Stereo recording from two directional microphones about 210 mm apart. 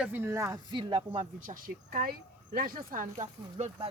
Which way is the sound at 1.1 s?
40° right (ahead or behind).